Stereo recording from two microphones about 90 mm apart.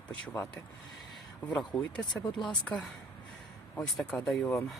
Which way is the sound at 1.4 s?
10° left (ahead or behind).